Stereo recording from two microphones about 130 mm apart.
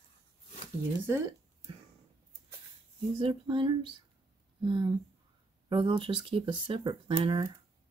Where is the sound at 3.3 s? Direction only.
40° right (ahead or behind).